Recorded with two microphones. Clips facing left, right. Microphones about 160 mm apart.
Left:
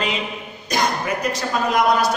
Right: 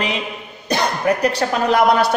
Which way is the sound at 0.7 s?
65° right (ahead or behind).